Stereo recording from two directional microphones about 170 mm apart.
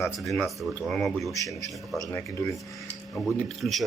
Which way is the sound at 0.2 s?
Centre (ahead or behind).